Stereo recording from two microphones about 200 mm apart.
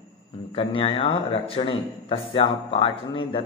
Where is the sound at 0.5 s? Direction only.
25° left (ahead or behind).